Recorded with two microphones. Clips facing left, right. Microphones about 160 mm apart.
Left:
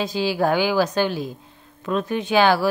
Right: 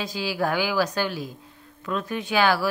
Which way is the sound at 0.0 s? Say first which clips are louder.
Left 5 dB; 25° left (ahead or behind).